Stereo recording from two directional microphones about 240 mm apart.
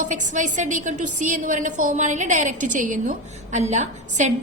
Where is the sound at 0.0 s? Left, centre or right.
Right.